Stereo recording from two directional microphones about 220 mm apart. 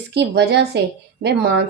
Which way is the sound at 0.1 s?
50° right (ahead or behind).